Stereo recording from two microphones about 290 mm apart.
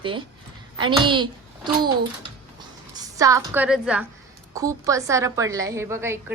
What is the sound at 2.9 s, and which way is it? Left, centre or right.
A woman's voice, centre.